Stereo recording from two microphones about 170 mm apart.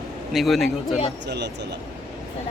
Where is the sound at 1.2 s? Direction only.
80° right.